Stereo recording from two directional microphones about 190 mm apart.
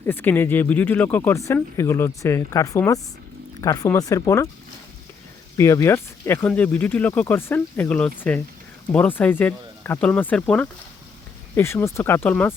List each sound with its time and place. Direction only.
0.0 s speech: 10° left (ahead or behind)
5.5 s speech: 15° left (ahead or behind)